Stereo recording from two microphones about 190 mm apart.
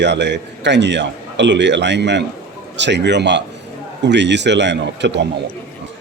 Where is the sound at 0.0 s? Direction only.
65° right (ahead or behind).